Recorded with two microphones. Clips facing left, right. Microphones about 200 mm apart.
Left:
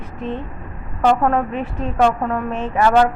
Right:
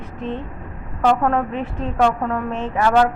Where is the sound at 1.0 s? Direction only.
10° left (ahead or behind).